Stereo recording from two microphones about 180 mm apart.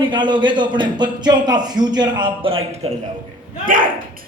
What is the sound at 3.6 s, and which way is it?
Speech, 50° right (ahead or behind).